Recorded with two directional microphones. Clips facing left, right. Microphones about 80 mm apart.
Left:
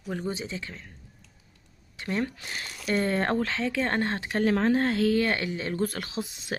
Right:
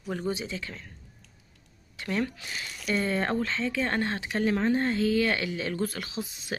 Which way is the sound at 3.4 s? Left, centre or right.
Left.